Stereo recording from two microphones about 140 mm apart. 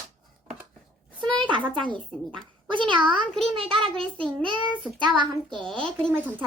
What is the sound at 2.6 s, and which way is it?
Speech, 35° right (ahead or behind).